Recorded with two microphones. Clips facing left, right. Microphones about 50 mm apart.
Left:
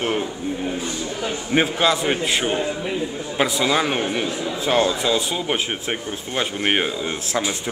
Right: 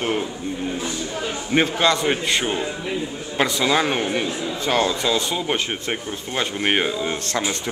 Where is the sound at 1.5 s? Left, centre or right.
Centre.